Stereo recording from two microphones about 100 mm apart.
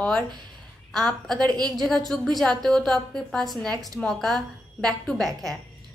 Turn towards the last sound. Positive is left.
turn(degrees=5)  # may be behind; listen again after turning